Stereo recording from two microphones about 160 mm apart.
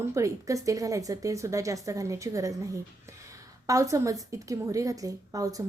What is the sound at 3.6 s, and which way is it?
Speech, 20° right (ahead or behind).